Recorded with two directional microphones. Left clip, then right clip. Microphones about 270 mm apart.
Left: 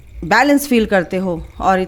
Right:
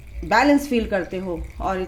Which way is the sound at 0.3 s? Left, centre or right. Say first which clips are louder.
Left 4 dB; left.